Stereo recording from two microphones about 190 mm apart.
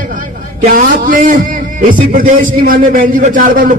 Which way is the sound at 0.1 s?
45° right (ahead or behind).